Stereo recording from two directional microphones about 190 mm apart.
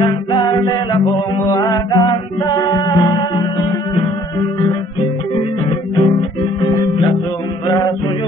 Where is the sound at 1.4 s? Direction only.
20° left (ahead or behind).